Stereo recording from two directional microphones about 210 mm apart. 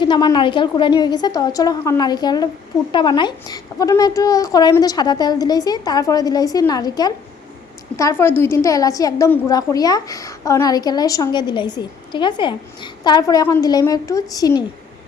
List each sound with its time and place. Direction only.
0.0 s a woman's voice: 20° left (ahead or behind)